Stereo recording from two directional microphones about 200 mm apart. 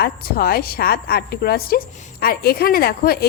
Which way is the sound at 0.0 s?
50° left (ahead or behind).